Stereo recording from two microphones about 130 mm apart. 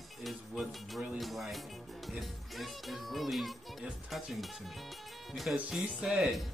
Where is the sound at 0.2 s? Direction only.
Centre (ahead or behind).